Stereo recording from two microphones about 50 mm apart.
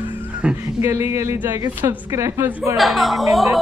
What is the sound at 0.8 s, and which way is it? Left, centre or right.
A woman's voice, right.